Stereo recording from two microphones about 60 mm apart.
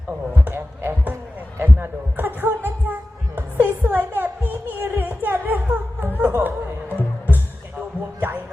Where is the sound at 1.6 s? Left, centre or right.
Right.